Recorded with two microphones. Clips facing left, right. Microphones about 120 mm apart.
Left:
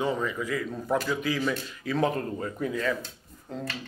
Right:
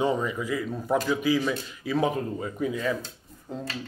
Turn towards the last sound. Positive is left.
turn(degrees=-15)  # may be behind; listen again after turning